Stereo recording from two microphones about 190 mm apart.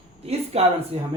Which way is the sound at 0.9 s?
30° right (ahead or behind).